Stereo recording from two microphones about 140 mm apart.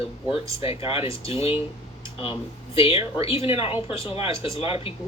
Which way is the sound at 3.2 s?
40° left (ahead or behind).